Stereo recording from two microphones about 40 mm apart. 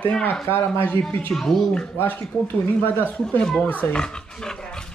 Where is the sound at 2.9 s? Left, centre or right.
Left.